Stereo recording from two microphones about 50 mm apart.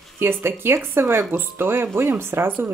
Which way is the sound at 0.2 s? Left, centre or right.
Right.